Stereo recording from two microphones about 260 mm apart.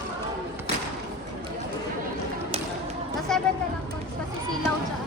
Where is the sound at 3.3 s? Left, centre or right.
Centre.